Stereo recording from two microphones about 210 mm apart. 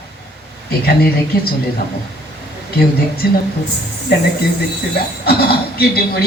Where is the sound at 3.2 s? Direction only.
50° left (ahead or behind).